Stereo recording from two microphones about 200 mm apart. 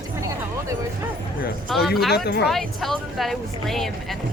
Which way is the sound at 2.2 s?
55° left (ahead or behind).